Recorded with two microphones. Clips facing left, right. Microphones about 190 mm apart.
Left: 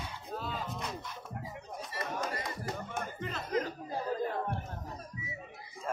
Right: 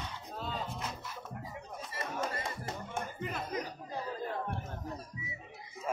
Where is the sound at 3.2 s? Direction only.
15° right (ahead or behind).